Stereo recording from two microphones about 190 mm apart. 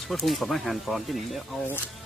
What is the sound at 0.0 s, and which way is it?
Speech, centre (ahead or behind).